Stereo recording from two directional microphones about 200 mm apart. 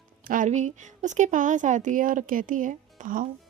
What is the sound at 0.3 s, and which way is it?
A woman's voice, 40° right (ahead or behind).